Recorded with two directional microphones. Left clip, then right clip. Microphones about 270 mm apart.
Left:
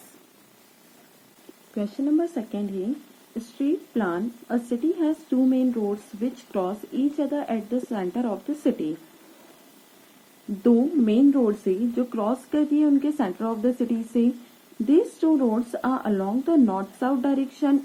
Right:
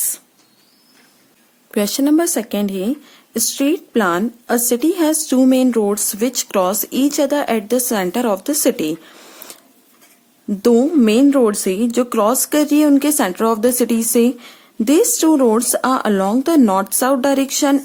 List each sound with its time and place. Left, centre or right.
1.7 s speech: right
10.6 s speech: right